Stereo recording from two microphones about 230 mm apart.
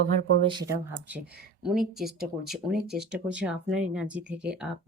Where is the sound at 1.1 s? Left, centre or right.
Centre.